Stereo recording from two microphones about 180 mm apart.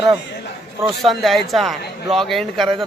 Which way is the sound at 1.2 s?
Centre (ahead or behind).